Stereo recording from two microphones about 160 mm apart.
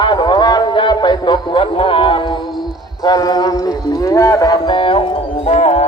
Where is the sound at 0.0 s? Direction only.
30° left (ahead or behind).